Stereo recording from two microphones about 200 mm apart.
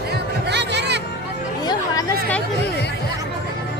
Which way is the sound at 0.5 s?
55° right (ahead or behind).